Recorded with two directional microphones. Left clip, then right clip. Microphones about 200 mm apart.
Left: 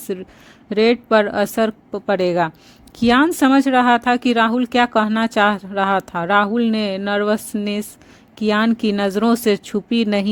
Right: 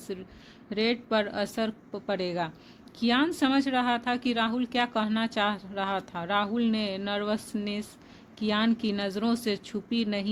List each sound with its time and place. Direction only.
0.1 s speech: 50° left (ahead or behind)